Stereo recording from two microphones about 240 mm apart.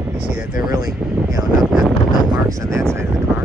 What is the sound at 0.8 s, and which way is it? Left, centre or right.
Speech, centre.